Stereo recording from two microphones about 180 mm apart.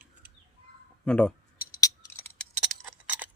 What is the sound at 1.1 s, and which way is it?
Speech, 5° left (ahead or behind).